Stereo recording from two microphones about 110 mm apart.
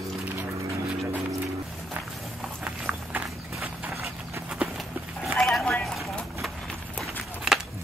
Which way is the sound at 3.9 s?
25° right (ahead or behind).